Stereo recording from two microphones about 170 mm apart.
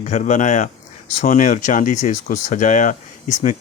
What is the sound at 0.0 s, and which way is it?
Speech, 45° left (ahead or behind).